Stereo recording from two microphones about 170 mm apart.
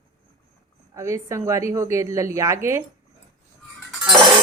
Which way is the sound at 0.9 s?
15° right (ahead or behind).